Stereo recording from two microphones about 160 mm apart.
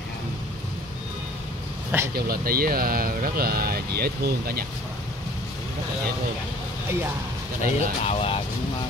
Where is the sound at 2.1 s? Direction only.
70° right (ahead or behind).